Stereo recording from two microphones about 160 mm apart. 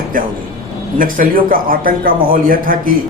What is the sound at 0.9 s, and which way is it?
A man's voice, 60° right (ahead or behind).